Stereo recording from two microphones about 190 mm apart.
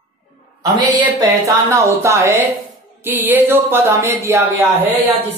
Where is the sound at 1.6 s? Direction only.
15° right (ahead or behind).